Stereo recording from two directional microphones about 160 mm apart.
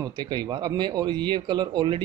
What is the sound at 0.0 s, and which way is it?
Speech, 25° right (ahead or behind).